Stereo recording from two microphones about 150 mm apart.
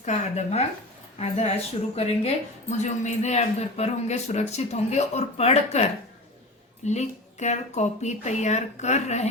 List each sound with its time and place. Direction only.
0.0 s a woman's voice: 50° left (ahead or behind)